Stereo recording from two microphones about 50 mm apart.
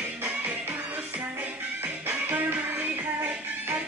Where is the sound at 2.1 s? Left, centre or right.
Right.